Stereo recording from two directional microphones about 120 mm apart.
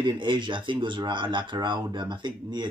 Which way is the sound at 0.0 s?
40° right (ahead or behind).